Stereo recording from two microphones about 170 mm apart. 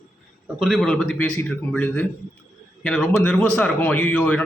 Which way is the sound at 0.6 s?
Centre (ahead or behind).